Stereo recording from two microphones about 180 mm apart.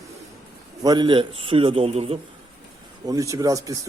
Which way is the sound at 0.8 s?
25° right (ahead or behind).